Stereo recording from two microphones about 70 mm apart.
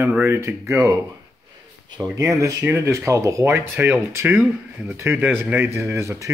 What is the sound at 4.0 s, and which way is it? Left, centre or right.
Speech, right.